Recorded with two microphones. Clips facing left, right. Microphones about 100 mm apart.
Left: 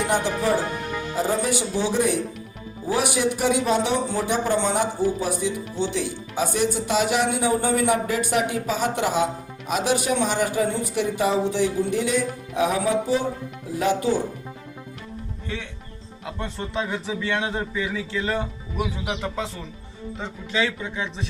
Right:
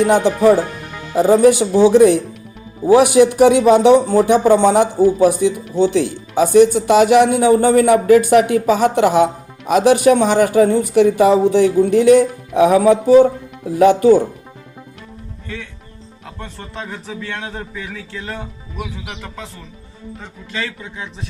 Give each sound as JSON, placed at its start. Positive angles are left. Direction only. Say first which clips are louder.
{"t": 1.1, "sound": "speech", "louder": "right 13 dB", "side_deg": -60}
{"t": 17.4, "sound": "speech", "louder": "left 2 dB", "side_deg": 15}